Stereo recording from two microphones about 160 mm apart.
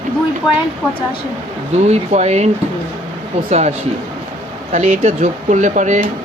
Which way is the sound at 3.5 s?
45° right (ahead or behind).